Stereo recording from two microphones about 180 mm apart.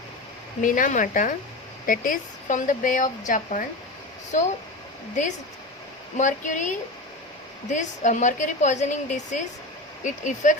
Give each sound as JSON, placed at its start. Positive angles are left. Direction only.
{"t": 0.6, "sound": "a woman's voice", "side_deg": 45}
{"t": 6.1, "sound": "a woman's voice", "side_deg": 45}